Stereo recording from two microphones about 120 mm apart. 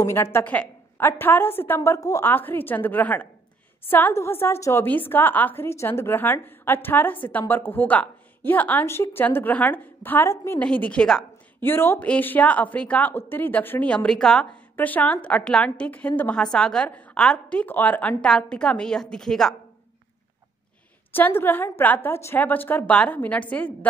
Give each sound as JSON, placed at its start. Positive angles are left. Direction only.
{"t": 0.0, "sound": "a woman's voice", "side_deg": 20}
{"t": 10.6, "sound": "a woman's voice", "side_deg": 10}
{"t": 11.6, "sound": "a woman's voice", "side_deg": 20}
{"t": 21.1, "sound": "a woman's voice", "side_deg": 20}